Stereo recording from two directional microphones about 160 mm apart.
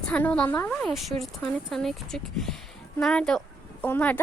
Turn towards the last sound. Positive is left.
turn(degrees=10)  # may be behind; listen again after turning